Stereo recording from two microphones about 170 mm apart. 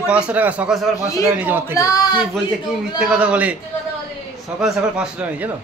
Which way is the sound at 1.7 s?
20° left (ahead or behind).